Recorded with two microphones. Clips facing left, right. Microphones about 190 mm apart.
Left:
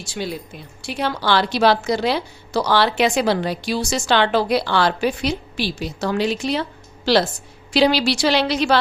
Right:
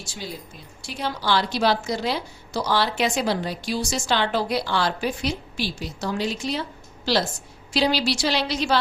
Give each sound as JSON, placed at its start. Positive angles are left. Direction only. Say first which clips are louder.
{"t": 0.1, "sound": "a woman's voice", "louder": "left 9 dB", "side_deg": 70}